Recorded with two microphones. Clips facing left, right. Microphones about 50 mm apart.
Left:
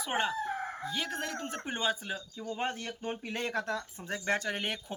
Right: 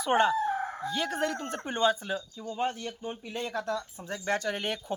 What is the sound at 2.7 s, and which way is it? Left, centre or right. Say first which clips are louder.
Speech: even; left.